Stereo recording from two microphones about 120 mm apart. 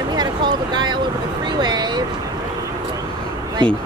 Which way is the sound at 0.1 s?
35° right (ahead or behind).